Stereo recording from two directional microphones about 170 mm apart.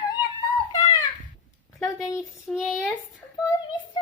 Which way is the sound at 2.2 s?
Centre (ahead or behind).